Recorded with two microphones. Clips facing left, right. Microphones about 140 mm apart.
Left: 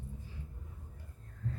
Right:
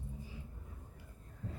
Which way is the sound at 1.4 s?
15° right (ahead or behind).